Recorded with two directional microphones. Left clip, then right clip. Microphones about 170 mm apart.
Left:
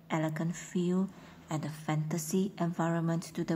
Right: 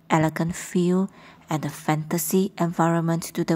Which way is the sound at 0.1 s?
35° right (ahead or behind).